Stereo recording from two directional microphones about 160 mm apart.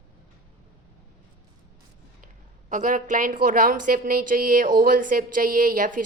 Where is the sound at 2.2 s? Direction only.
55° right (ahead or behind).